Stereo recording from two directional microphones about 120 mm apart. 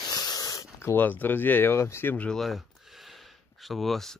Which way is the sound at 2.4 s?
Centre (ahead or behind).